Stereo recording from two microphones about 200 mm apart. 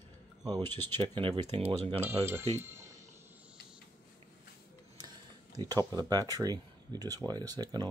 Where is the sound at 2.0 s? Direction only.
10° right (ahead or behind).